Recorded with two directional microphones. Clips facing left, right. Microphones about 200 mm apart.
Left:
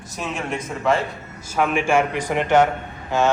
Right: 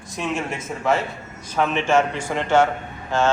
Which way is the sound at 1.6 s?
10° left (ahead or behind).